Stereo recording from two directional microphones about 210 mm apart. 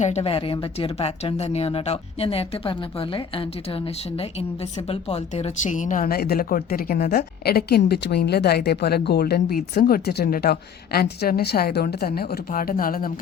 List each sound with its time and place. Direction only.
0.0 s speech: 30° left (ahead or behind)